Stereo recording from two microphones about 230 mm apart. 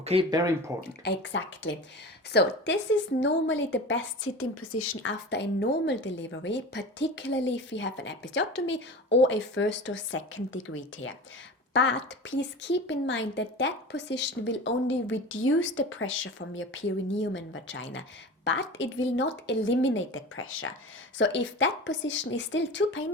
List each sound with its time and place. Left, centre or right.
0.0 s speech: right
1.0 s a woman's voice: left
5.0 s a woman's voice: left